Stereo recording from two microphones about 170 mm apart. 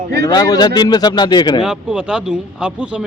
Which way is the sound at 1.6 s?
5° right (ahead or behind).